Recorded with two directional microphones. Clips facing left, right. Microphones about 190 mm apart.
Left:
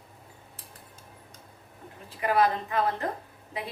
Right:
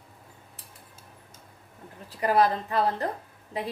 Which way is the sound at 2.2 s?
35° right (ahead or behind).